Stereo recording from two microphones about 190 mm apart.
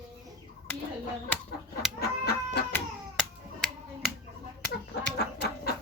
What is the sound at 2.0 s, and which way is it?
Chicken, 55° left (ahead or behind).